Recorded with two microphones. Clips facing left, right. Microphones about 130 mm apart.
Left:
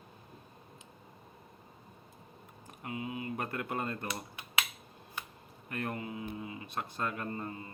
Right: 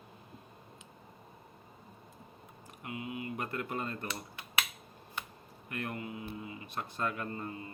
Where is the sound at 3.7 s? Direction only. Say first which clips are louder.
Left 2 dB; 45° left (ahead or behind).